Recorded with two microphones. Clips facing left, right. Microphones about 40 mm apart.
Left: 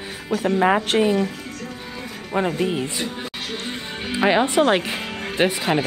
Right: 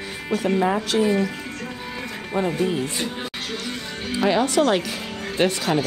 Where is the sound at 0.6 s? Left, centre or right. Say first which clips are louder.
Left 5 dB; left.